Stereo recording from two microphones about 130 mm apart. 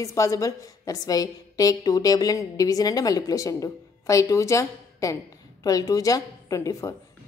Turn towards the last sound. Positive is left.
turn(degrees=25)  # may be behind; listen again after turning